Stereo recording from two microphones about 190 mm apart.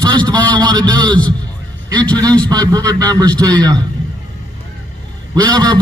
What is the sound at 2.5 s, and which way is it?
A man's voice, 20° right (ahead or behind).